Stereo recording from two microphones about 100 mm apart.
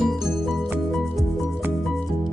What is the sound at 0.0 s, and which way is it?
Music, centre (ahead or behind).